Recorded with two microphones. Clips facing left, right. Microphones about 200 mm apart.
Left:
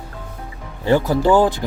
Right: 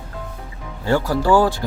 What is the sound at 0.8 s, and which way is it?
Speech, 20° left (ahead or behind).